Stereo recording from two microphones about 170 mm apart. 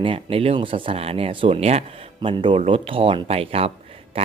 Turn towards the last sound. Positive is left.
turn(degrees=-35)  # may be behind; listen again after turning